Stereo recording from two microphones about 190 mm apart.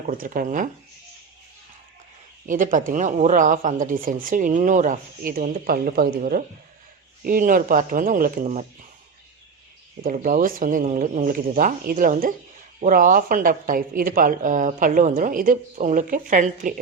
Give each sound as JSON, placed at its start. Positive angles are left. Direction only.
{"t": 0.1, "sound": "a woman's voice", "side_deg": -50}
{"t": 2.5, "sound": "a woman's voice", "side_deg": -45}
{"t": 10.0, "sound": "a woman's voice", "side_deg": -45}